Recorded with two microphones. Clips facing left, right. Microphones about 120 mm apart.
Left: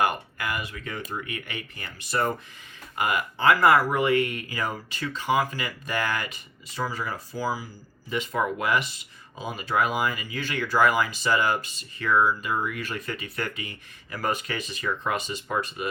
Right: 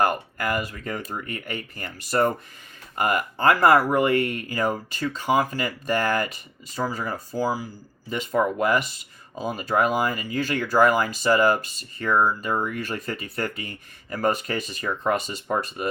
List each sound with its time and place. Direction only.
0.0 s speech: 45° right (ahead or behind)